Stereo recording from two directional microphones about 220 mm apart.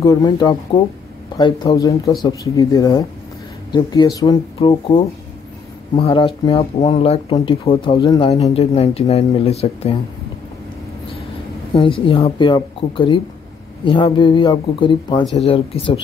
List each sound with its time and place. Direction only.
0.0 s speech: 15° left (ahead or behind)
11.7 s speech: 25° left (ahead or behind)